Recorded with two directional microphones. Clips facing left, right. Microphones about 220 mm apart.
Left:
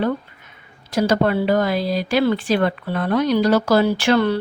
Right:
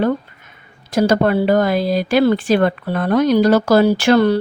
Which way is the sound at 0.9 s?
50° right (ahead or behind).